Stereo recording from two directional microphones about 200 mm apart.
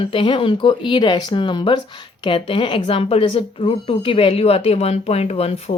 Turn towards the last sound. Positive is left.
turn(degrees=30)  # may be behind; listen again after turning